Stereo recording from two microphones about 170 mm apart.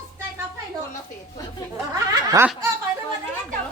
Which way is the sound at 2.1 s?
25° right (ahead or behind).